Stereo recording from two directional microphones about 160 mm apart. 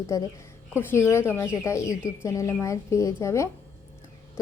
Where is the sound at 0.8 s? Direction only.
15° left (ahead or behind).